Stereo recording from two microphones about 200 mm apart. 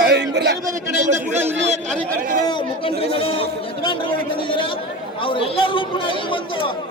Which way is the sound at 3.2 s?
25° left (ahead or behind).